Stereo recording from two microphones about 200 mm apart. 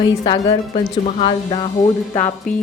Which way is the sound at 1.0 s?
30° left (ahead or behind).